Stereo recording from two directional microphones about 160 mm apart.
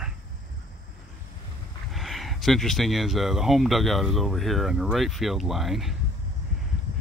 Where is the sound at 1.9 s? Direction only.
Centre (ahead or behind).